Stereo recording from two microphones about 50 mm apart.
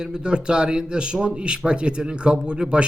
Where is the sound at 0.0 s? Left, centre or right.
Centre.